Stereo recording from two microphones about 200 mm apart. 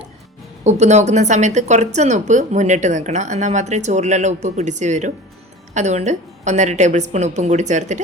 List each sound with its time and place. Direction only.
0.6 s speech: 35° right (ahead or behind)